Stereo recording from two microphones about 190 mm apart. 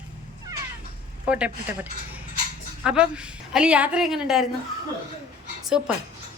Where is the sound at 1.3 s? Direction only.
5° right (ahead or behind).